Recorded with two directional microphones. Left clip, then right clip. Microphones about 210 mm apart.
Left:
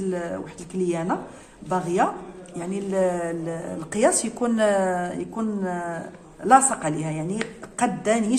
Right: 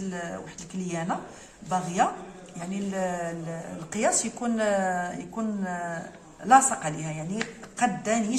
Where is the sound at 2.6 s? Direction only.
35° left (ahead or behind).